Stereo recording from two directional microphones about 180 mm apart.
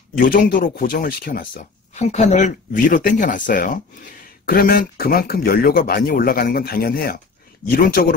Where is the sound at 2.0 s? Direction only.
40° left (ahead or behind).